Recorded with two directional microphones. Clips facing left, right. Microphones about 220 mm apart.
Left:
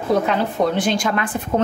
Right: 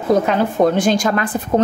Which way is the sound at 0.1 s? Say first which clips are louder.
Right 3 dB; 45° right (ahead or behind).